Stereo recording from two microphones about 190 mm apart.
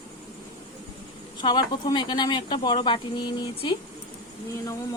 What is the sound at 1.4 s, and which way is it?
Speech, 25° left (ahead or behind).